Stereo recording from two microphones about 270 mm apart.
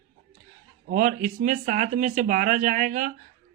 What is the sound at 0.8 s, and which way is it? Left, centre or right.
Speech, right.